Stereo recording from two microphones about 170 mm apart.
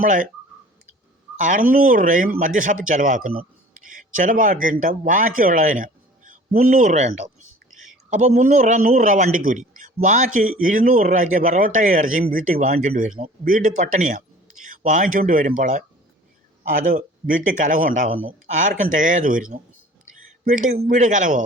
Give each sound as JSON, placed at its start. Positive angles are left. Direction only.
{"t": 0.0, "sound": "a man's voice", "side_deg": -50}
{"t": 1.4, "sound": "a man's voice", "side_deg": -50}